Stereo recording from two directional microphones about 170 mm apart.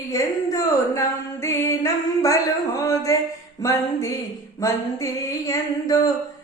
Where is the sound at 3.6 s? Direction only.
20° left (ahead or behind).